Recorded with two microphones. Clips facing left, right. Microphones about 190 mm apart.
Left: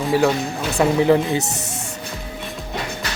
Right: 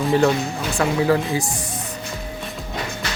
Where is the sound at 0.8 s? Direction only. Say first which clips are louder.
Left 3 dB; 20° left (ahead or behind).